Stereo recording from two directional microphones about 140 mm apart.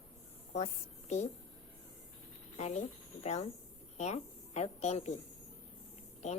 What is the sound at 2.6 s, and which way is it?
Speech, 55° left (ahead or behind).